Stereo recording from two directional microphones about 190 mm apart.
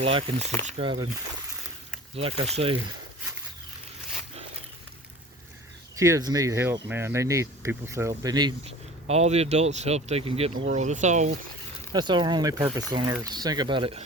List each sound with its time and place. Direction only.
0.0 s speech: 30° right (ahead or behind)
2.1 s speech: 30° right (ahead or behind)
6.0 s speech: 15° right (ahead or behind); by 11.3 s 40° right (ahead or behind)
11.9 s speech: 25° right (ahead or behind)